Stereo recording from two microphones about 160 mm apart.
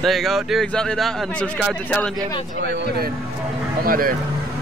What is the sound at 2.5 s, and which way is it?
Speech, 90° right.